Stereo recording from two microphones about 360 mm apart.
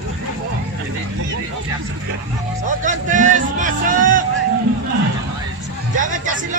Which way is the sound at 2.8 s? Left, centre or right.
Right.